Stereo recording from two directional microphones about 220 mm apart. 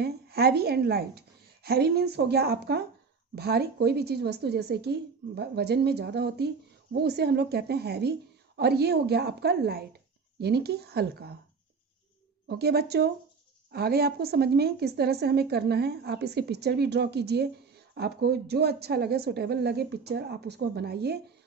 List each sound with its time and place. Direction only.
0.0 s a woman's voice: 45° right (ahead or behind)
12.4 s a woman's voice: 45° right (ahead or behind)